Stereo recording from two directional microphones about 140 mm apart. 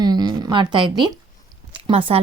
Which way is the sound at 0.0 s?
30° right (ahead or behind).